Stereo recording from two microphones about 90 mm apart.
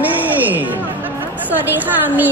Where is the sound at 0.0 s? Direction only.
20° right (ahead or behind).